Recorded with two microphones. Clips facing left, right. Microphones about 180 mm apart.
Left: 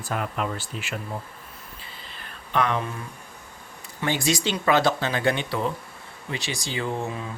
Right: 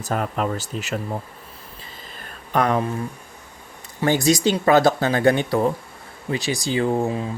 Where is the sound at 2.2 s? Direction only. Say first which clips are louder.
Right 4 dB; 45° right (ahead or behind).